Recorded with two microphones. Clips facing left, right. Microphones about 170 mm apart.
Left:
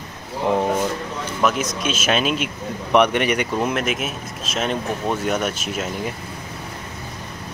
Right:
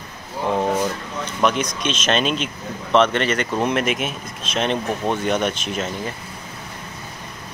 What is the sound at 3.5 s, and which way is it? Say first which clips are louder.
Speech: right 1 dB; centre (ahead or behind).